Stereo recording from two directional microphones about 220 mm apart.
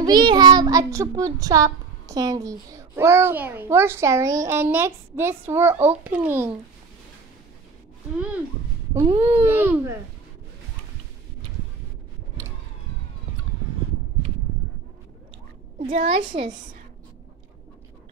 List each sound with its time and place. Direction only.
0.0 s child singing: 20° right (ahead or behind)
8.9 s child singing: 10° right (ahead or behind)
15.9 s a woman's voice: 35° right (ahead or behind)